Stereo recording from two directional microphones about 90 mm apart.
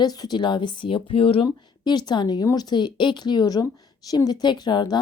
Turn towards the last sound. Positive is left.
turn(degrees=55)  # may be behind; listen again after turning